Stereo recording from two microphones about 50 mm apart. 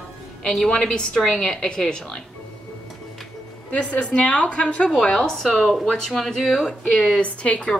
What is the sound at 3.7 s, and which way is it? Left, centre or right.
A woman's voice, left.